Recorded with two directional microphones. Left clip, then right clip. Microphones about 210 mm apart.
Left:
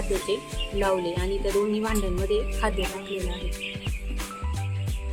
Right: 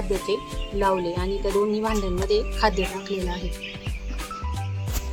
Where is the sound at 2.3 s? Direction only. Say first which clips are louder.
Right 5 dB; 20° right (ahead or behind).